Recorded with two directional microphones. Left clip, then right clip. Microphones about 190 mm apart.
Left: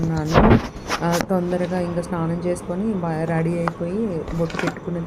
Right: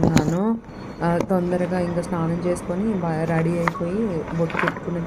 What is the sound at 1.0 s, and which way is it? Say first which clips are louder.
A woman's voice: right 1 dB; centre (ahead or behind).